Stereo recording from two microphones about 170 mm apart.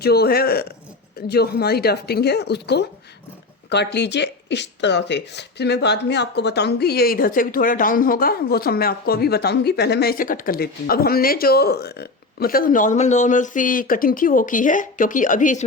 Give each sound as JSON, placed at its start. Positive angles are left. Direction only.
{"t": 0.0, "sound": "speech", "side_deg": 65}